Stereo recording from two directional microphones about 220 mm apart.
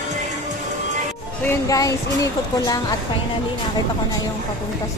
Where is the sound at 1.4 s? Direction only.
15° left (ahead or behind).